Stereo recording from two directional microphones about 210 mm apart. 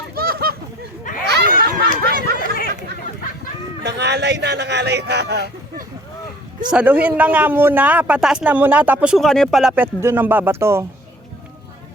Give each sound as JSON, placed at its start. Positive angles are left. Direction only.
{"t": 0.1, "sound": "honk", "side_deg": -45}
{"t": 1.2, "sound": "a sound", "side_deg": -50}
{"t": 3.8, "sound": "a man's voice", "side_deg": -55}
{"t": 6.7, "sound": "a man's voice", "side_deg": -5}